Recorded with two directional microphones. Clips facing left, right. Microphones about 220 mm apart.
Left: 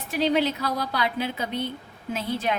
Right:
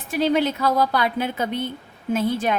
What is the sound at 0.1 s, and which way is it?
A woman's voice, 50° right (ahead or behind).